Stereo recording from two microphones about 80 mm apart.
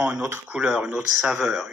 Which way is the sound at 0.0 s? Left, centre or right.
Centre.